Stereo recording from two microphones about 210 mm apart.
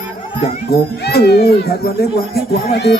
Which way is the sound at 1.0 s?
50° left (ahead or behind).